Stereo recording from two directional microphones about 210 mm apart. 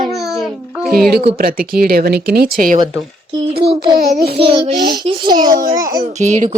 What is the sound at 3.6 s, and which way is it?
Child singing, 25° right (ahead or behind).